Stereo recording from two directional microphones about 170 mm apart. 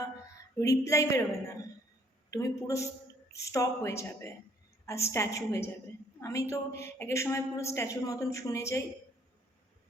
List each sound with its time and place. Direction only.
0.6 s a woman's voice: 20° left (ahead or behind)